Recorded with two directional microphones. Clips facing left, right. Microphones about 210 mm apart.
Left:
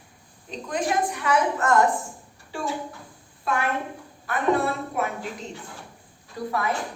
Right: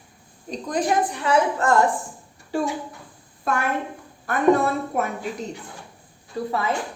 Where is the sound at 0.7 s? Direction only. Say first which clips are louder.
Right 3 dB; 35° right (ahead or behind).